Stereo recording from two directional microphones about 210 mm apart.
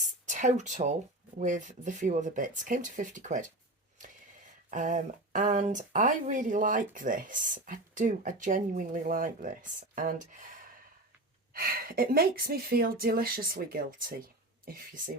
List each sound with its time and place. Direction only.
0.0 s a sound: 35° right (ahead or behind)
1.4 s speech: 35° right (ahead or behind)
4.7 s speech: 35° right (ahead or behind)